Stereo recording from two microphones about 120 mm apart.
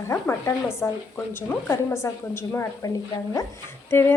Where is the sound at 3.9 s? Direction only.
20° left (ahead or behind).